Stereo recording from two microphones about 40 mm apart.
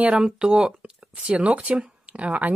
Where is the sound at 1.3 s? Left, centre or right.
Right.